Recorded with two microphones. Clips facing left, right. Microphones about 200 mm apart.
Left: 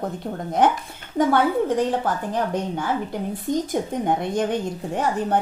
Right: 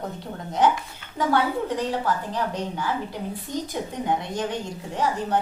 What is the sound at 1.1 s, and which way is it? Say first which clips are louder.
A woman's voice: left 4 dB; 50° left (ahead or behind).